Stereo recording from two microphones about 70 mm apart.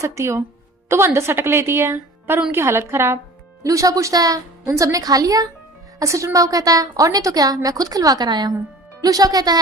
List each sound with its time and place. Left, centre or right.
0.0 s a woman's voice: right
3.6 s a woman's voice: right
9.0 s a woman's voice: right